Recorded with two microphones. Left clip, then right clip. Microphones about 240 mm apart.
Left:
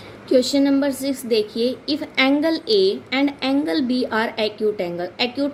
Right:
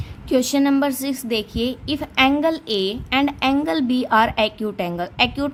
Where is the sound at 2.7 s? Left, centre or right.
Right.